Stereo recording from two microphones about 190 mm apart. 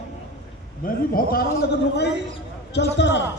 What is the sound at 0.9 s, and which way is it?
Speech, 50° left (ahead or behind).